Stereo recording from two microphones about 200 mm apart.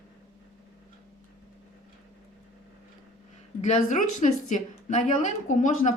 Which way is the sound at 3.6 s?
35° left (ahead or behind).